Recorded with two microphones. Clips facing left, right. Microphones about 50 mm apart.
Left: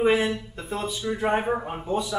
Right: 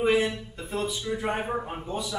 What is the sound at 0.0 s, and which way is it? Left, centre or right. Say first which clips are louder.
Speech: left 2 dB; centre.